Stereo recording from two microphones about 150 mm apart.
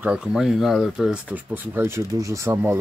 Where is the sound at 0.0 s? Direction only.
5° right (ahead or behind).